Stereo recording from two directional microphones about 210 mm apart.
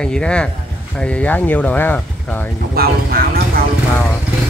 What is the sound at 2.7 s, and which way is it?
Speech, 45° right (ahead or behind).